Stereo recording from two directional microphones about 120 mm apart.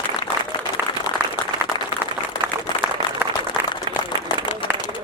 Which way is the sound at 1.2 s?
15° right (ahead or behind).